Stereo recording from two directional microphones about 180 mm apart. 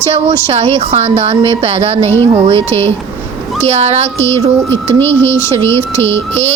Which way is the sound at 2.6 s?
15° left (ahead or behind).